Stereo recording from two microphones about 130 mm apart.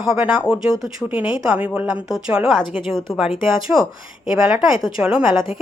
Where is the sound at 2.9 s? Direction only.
5° left (ahead or behind).